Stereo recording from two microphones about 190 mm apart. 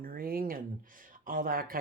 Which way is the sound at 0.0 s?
50° right (ahead or behind).